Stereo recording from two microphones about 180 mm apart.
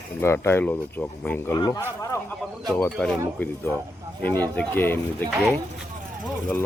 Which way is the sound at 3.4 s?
10° left (ahead or behind).